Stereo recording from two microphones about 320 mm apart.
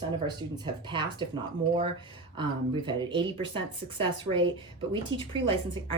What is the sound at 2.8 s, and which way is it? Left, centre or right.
Speech, centre.